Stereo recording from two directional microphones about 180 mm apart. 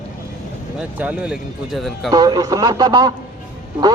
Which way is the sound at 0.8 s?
10° right (ahead or behind).